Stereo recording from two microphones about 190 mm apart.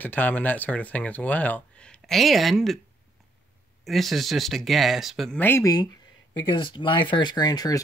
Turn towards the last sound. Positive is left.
turn(degrees=20)  # may be behind; listen again after turning